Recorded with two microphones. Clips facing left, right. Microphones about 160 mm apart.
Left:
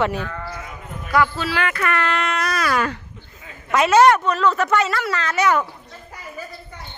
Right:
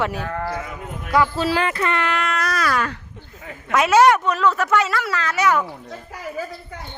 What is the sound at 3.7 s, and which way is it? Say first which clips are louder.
A woman's voice: left 1 dB; 5° right (ahead or behind).